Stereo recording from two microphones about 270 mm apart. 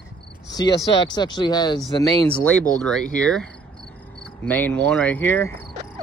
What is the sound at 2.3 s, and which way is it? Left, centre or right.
A man's voice, centre.